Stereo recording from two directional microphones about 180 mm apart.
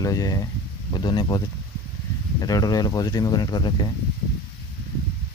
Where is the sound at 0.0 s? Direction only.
20° left (ahead or behind).